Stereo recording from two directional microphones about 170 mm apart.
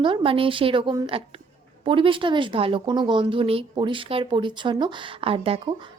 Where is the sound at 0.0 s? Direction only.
30° right (ahead or behind).